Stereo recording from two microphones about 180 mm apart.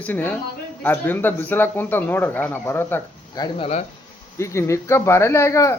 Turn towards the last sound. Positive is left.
turn(degrees=15)  # may be behind; listen again after turning